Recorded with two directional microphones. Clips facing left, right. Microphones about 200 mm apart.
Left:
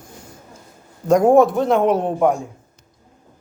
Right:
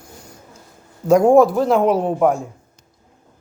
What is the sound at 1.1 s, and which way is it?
Speech, centre (ahead or behind).